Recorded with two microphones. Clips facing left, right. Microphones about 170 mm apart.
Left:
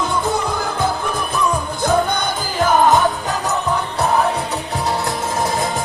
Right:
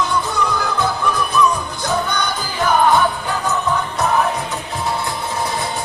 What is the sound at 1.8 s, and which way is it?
Music, 50° left (ahead or behind).